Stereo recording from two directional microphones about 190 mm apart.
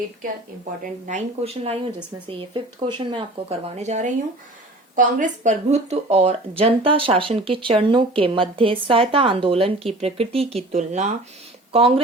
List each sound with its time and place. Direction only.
1.0 s speech: 35° right (ahead or behind)